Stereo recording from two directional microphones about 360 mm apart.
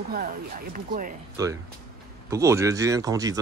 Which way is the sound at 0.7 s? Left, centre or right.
Right.